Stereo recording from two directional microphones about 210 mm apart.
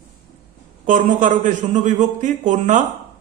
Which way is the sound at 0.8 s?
40° right (ahead or behind).